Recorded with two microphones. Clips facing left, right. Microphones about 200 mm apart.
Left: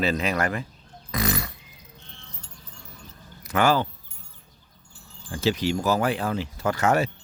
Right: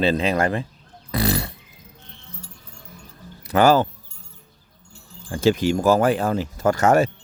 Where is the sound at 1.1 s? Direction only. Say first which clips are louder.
Right 4 dB; 30° right (ahead or behind).